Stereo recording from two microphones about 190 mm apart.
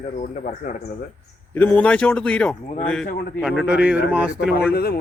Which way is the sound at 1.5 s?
10° left (ahead or behind).